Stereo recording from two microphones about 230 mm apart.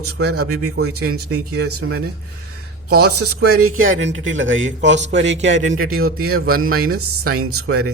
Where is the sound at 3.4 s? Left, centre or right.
Right.